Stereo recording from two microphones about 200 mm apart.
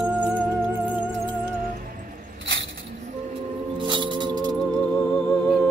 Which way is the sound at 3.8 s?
25° right (ahead or behind).